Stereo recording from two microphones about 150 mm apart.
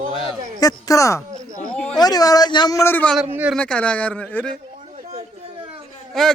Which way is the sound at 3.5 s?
10° left (ahead or behind).